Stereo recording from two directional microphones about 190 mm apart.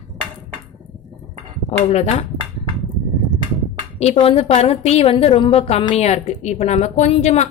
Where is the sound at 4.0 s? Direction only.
30° left (ahead or behind).